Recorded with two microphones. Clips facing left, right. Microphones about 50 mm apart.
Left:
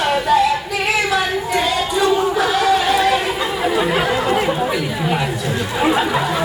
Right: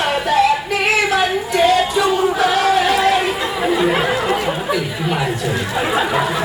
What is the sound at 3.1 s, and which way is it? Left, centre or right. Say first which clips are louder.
Chatter: right 1 dB; centre.